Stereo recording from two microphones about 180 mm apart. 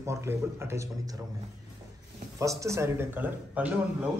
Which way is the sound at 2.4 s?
15° right (ahead or behind).